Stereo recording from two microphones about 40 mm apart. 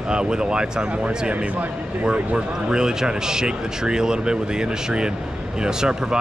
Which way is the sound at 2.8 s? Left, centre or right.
Centre.